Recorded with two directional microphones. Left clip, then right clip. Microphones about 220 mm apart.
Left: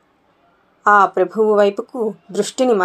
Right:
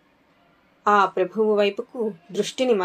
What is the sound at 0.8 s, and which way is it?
Speech, 20° left (ahead or behind).